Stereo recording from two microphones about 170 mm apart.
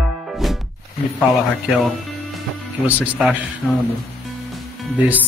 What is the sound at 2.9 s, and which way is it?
Speech, 10° right (ahead or behind).